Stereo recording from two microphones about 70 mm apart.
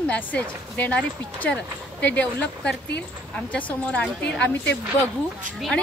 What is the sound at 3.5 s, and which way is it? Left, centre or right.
Speech, centre.